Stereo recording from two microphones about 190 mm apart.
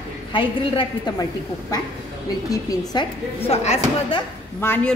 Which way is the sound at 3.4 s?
35° left (ahead or behind).